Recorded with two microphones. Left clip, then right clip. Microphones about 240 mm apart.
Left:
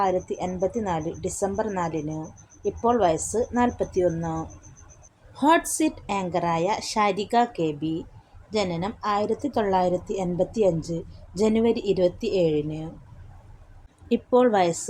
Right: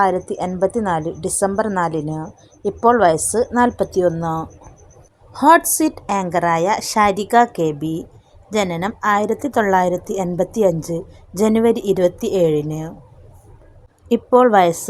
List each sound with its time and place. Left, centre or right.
0.0 s a woman's voice: right
14.1 s a woman's voice: centre